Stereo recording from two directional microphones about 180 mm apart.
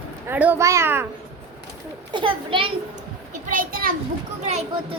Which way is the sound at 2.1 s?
30° right (ahead or behind).